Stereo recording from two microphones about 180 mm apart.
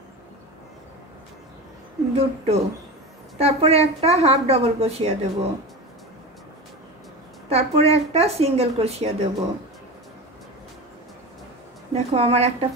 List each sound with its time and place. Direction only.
2.1 s speech: 35° right (ahead or behind)
7.4 s speech: 35° right (ahead or behind)
11.9 s speech: 35° right (ahead or behind)